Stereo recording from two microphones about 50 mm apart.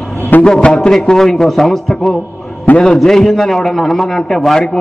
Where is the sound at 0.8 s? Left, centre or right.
Centre.